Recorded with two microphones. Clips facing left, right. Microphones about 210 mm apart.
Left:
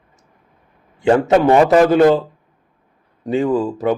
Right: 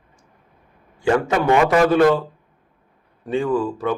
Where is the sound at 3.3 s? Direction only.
20° left (ahead or behind).